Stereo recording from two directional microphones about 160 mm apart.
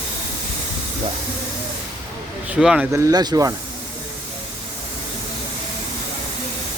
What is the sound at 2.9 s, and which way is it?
Speech, 20° right (ahead or behind).